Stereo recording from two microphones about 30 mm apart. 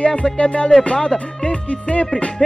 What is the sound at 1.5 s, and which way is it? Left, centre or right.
Music, left.